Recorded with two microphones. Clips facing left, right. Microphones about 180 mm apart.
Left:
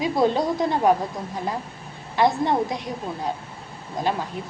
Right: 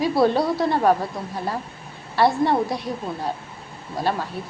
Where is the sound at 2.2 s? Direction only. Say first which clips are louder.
Right 1 dB; 15° left (ahead or behind).